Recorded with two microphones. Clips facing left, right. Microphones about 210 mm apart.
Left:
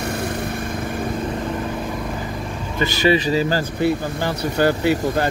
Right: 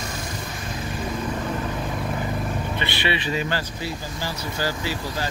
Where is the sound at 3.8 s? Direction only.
60° left (ahead or behind).